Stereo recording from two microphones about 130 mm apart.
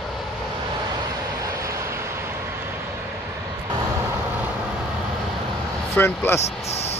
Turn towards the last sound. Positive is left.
turn(degrees=20)  # may be behind; listen again after turning